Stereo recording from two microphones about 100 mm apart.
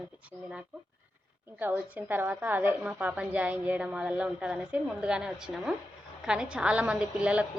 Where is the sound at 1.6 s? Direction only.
20° right (ahead or behind).